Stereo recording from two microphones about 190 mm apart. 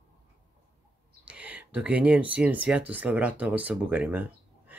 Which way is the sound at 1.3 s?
5° right (ahead or behind).